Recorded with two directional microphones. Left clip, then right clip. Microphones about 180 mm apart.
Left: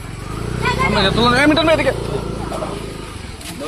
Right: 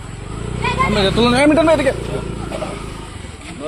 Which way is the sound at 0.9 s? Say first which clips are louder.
Left 1 dB; 40° right (ahead or behind).